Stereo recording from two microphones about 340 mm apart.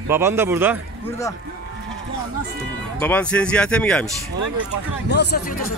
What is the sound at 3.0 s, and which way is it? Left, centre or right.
Speech, centre.